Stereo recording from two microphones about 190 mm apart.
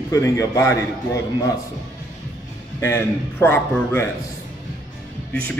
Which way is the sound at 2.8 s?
15° left (ahead or behind).